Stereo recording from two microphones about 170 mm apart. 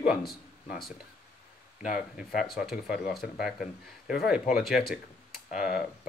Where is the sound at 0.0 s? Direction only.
Centre (ahead or behind).